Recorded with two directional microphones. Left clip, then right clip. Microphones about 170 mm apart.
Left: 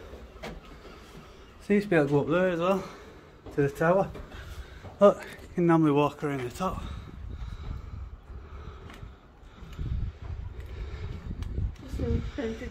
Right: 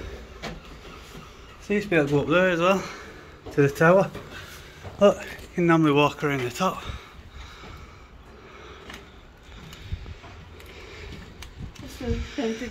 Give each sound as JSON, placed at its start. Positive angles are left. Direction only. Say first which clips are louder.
{"t": 1.7, "sound": "speech", "louder": "right 2 dB", "side_deg": 30}
{"t": 3.5, "sound": "speech", "louder": "right 6 dB", "side_deg": -15}
{"t": 4.9, "sound": "speech", "louder": "right 1 dB", "side_deg": 15}
{"t": 12.1, "sound": "a sound", "louder": "right 5 dB", "side_deg": 10}